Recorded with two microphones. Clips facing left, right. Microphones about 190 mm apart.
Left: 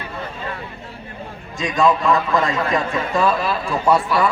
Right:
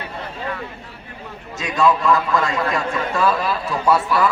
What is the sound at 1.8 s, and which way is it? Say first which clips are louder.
A man's voice: even; 15° left (ahead or behind).